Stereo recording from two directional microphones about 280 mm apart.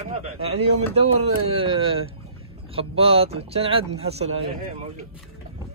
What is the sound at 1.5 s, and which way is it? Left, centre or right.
Speech, centre.